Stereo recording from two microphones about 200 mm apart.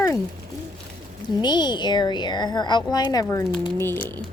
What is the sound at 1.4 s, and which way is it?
A woman's voice, 20° left (ahead or behind).